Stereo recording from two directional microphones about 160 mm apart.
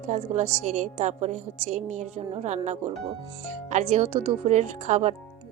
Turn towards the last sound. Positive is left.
turn(degrees=-45)  # may be behind; listen again after turning